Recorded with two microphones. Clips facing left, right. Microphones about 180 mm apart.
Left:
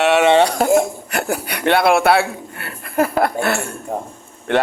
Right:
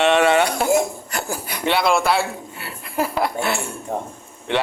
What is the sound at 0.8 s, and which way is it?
A man's voice, 60° left (ahead or behind).